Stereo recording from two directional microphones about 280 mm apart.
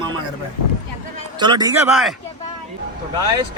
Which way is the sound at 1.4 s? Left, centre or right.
Centre.